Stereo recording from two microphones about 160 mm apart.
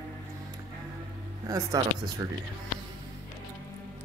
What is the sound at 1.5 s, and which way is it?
Speech, 25° right (ahead or behind).